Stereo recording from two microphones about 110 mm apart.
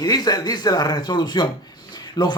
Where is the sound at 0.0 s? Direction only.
35° left (ahead or behind).